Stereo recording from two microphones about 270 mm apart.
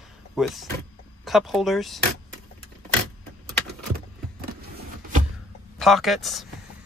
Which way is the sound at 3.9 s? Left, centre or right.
Right.